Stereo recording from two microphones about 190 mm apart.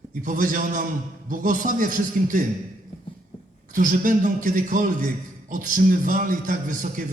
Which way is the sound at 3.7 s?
45° right (ahead or behind).